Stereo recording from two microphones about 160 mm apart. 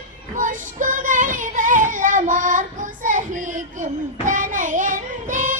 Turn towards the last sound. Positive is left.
turn(degrees=-55)  # may be behind; listen again after turning